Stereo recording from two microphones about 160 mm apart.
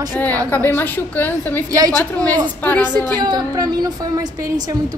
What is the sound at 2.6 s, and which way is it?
Speech, 10° left (ahead or behind).